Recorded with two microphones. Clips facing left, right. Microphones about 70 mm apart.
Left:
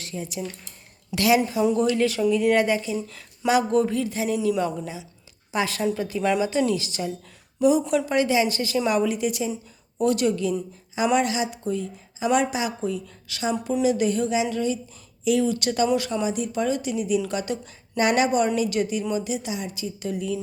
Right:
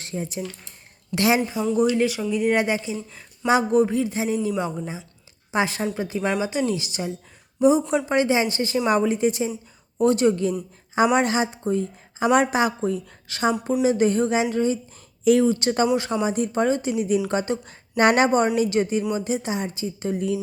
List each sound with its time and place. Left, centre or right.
0.0 s a woman's voice: right
12.2 s a woman's voice: right
17.9 s a woman's voice: right